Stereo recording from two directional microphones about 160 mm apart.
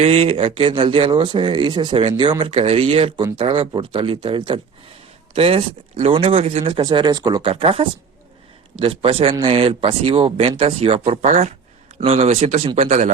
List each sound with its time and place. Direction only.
0.0 s a man's voice: 40° right (ahead or behind)